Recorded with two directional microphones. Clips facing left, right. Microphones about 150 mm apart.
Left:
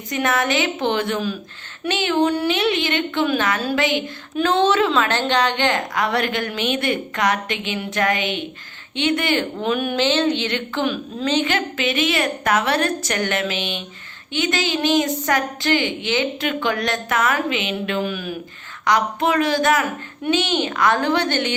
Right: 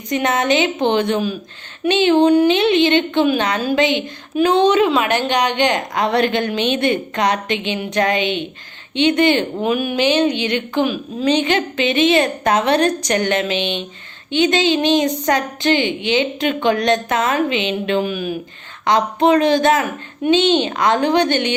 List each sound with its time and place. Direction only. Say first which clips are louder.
0.1 s a woman's voice: right 4 dB; 20° right (ahead or behind)
9.7 s a woman's voice: right 3 dB; 10° right (ahead or behind)